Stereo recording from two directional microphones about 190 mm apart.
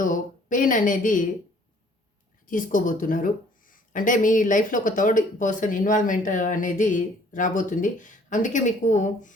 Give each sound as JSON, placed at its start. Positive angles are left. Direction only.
{"t": 0.0, "sound": "a woman's voice", "side_deg": 45}
{"t": 2.5, "sound": "speech", "side_deg": 45}